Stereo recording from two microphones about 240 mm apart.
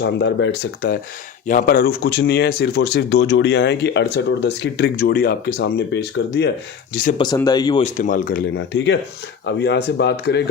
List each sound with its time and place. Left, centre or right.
0.0 s speech: left
7.2 s speech: centre
7.9 s speech: left
8.5 s speech: left